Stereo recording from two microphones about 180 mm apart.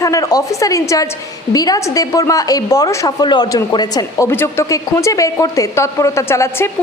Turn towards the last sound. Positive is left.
turn(degrees=15)  # may be behind; listen again after turning